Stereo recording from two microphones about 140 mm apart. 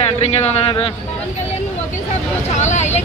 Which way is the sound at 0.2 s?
50° left (ahead or behind).